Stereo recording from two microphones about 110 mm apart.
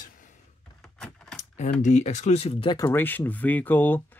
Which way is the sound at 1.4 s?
90° left.